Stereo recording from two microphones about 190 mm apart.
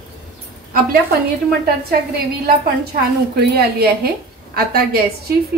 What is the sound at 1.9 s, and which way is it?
A woman's voice, 55° right (ahead or behind).